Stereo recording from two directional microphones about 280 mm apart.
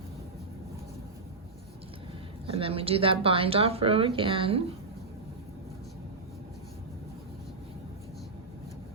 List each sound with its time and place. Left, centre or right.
2.5 s speech: centre